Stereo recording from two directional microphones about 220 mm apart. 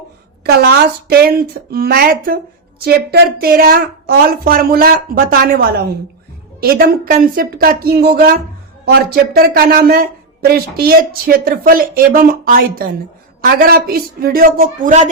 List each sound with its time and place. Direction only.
0.4 s a woman's voice: 45° right (ahead or behind)